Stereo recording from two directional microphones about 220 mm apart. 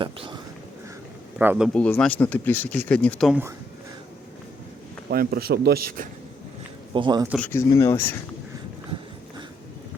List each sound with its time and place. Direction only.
0.0 s a sound: 20° right (ahead or behind)
1.4 s speech: 5° right (ahead or behind)
5.0 s speech: 45° right (ahead or behind)
6.9 s speech: 20° right (ahead or behind)
7.3 s speech: 5° left (ahead or behind)